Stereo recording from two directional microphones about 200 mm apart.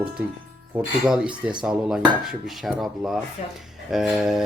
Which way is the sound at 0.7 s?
5° right (ahead or behind).